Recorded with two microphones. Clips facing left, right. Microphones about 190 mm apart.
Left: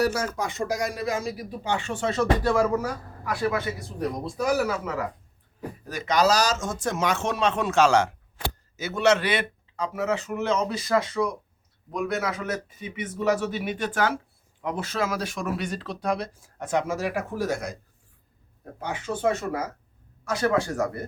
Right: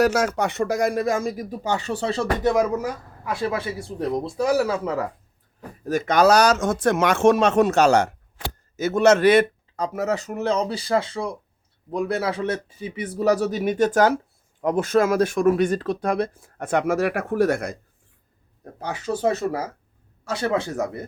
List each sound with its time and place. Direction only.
0.0 s speech: 90° right; by 2.2 s 35° right (ahead or behind)
2.4 s a man's voice: 20° right (ahead or behind)
5.8 s speech: 45° right (ahead or behind)
18.8 s a man's voice: 35° right (ahead or behind); by 21.0 s 20° right (ahead or behind)